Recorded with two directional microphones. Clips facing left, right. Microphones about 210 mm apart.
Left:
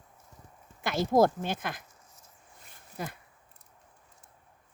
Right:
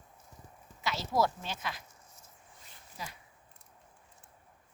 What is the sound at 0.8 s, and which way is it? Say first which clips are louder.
Speech: left 7 dB; 50° left (ahead or behind).